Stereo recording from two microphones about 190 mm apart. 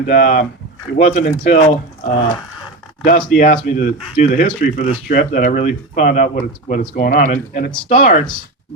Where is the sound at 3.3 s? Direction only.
45° left (ahead or behind).